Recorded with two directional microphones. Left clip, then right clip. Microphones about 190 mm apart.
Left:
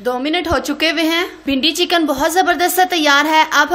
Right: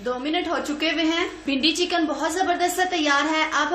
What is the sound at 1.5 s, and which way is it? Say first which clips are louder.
A woman's voice: left 7 dB; 35° left (ahead or behind).